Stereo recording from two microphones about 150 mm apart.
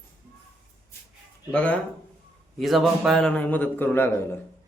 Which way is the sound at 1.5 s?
10° left (ahead or behind).